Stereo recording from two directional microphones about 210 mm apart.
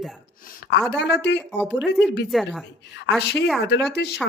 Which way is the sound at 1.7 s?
Centre (ahead or behind).